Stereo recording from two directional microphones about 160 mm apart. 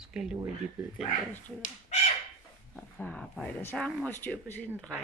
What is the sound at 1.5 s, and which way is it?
Speech, 50° left (ahead or behind).